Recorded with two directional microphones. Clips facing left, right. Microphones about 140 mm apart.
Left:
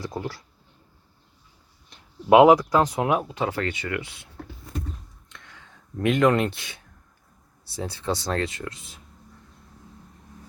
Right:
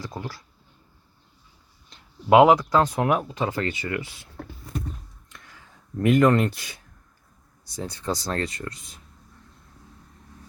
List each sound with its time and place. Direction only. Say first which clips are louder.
0.0 s speech: left 3 dB; 20° left (ahead or behind)
2.3 s speech: left 1 dB; 15° left (ahead or behind); by 4.1 s centre (ahead or behind)
5.3 s a sound: left 1 dB; 5° right (ahead or behind)
6.1 s speech: right 2 dB; centre (ahead or behind)
7.8 s speech: left 1 dB; 5° left (ahead or behind)